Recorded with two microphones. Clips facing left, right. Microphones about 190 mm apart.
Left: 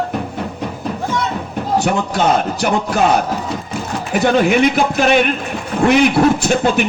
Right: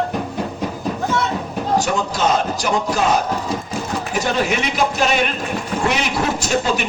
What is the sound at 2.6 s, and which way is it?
Speech, 60° left (ahead or behind).